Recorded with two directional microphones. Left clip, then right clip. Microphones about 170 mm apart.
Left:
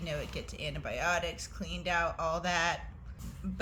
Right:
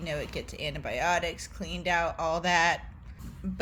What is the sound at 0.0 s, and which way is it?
A woman's voice, 25° right (ahead or behind).